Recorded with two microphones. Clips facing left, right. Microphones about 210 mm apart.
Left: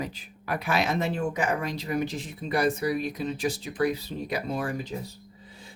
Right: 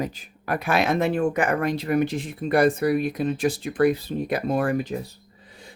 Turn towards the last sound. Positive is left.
turn(degrees=-60)  # may be behind; listen again after turning